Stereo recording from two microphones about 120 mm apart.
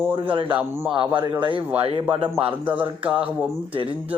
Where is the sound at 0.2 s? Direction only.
45° right (ahead or behind).